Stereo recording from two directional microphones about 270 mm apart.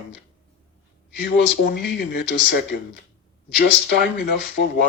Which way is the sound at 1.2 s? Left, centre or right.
Left.